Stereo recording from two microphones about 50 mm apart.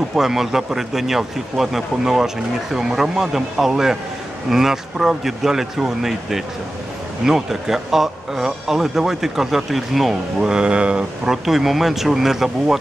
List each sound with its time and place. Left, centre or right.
0.1 s speech: centre
10.5 s speech: centre
11.4 s speech: centre